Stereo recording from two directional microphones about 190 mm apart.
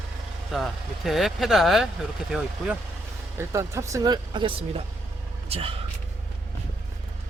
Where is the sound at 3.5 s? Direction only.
15° right (ahead or behind).